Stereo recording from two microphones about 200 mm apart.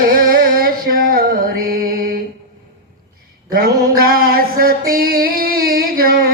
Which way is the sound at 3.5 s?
45° right (ahead or behind).